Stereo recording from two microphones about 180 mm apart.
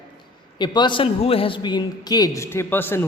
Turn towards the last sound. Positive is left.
turn(degrees=10)  # may be behind; listen again after turning